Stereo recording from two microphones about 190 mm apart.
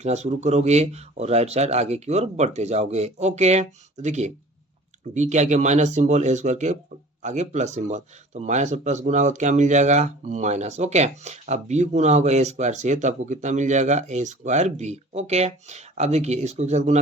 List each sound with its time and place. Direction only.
0.0 s speech: 35° right (ahead or behind)